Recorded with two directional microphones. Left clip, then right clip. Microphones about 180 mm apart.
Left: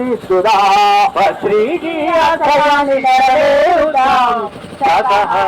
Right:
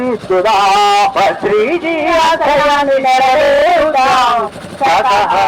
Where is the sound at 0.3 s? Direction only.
25° right (ahead or behind).